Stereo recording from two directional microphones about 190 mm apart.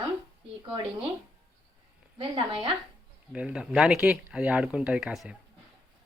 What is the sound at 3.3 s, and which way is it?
Speech, 5° right (ahead or behind).